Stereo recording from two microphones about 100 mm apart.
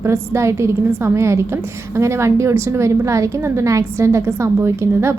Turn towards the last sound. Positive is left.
turn(degrees=-25)  # may be behind; listen again after turning